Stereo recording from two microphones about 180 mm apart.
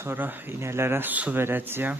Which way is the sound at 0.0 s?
10° right (ahead or behind).